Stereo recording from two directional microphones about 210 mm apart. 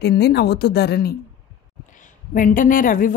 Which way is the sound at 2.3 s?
40° left (ahead or behind).